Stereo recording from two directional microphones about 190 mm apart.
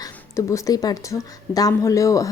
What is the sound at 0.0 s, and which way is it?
Speech, 15° left (ahead or behind).